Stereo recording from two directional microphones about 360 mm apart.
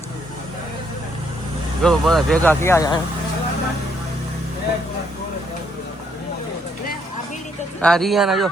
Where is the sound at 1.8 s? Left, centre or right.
Centre.